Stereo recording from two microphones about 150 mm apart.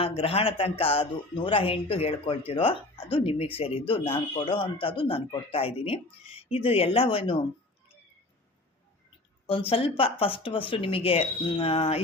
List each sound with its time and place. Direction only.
0.0 s speech: 40° left (ahead or behind)
9.5 s speech: 40° left (ahead or behind)